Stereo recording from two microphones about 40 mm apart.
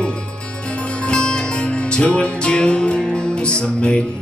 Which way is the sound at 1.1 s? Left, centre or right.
Left.